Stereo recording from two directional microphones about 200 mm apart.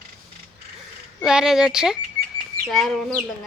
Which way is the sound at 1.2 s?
Centre (ahead or behind).